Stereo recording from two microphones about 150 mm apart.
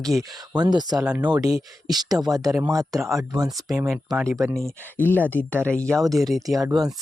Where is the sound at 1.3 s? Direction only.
25° right (ahead or behind).